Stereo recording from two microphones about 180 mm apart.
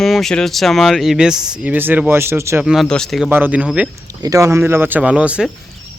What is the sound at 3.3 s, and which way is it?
Speech, 10° right (ahead or behind).